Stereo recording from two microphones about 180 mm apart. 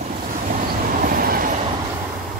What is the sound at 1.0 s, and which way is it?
Train, 55° right (ahead or behind).